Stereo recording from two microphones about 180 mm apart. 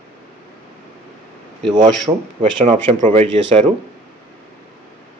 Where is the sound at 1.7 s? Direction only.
25° right (ahead or behind).